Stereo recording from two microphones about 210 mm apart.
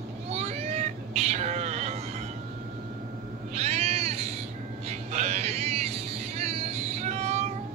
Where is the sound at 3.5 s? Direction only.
30° right (ahead or behind).